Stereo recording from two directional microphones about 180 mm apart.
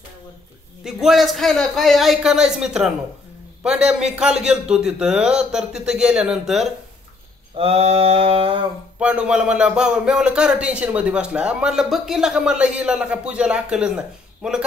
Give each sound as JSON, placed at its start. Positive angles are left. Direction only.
{"t": 0.8, "sound": "a man's voice", "side_deg": 0}
{"t": 7.5, "sound": "mantra", "side_deg": -35}
{"t": 9.0, "sound": "a man's voice", "side_deg": -5}